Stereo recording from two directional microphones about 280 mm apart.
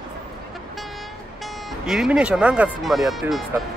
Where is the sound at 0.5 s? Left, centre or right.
Centre.